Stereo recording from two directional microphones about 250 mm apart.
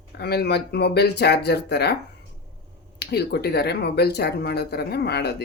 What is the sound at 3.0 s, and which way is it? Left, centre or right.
Speech, left.